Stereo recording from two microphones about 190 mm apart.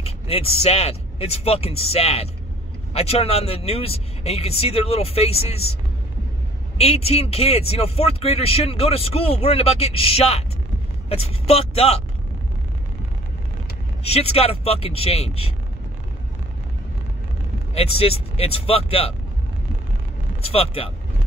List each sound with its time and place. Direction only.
0.0 s speech: 30° left (ahead or behind)
6.8 s speech: 30° left (ahead or behind)
14.0 s speech: 35° left (ahead or behind)
17.7 s speech: 30° left (ahead or behind)
20.4 s speech: 30° left (ahead or behind)